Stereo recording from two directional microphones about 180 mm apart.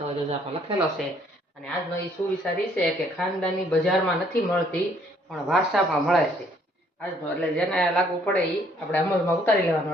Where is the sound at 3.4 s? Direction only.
5° left (ahead or behind).